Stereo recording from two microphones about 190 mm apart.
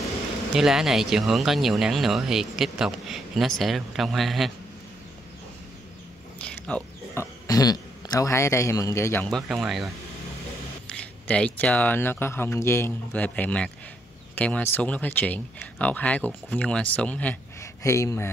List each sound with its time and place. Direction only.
0.6 s speech: 5° right (ahead or behind)
6.4 s a sound: 5° left (ahead or behind)
7.4 s speech: 20° left (ahead or behind)
9.5 s speech: centre (ahead or behind)
10.9 s speech: 5° left (ahead or behind)